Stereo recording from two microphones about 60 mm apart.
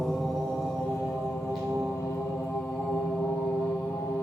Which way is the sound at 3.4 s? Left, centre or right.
Centre.